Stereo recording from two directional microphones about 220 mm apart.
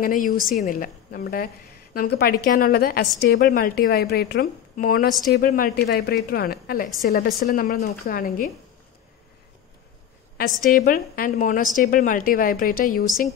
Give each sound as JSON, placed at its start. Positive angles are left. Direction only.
{"t": 0.0, "sound": "a woman's voice", "side_deg": 35}
{"t": 10.3, "sound": "a woman's voice", "side_deg": 40}